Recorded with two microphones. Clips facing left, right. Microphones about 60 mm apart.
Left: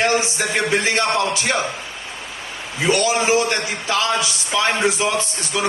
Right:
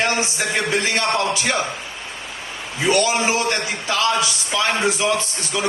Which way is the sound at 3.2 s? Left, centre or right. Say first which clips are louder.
Left 2 dB; left.